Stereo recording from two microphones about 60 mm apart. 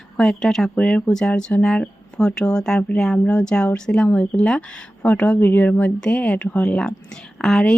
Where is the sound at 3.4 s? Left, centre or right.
Centre; by 5.9 s left.